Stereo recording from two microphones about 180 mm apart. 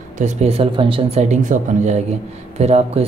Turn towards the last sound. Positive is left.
turn(degrees=-35)  # may be behind; listen again after turning